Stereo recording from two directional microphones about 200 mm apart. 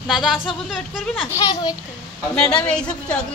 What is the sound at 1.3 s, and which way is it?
Speech, 20° left (ahead or behind).